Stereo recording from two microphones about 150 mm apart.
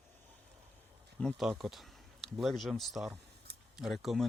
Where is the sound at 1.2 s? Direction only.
5° left (ahead or behind).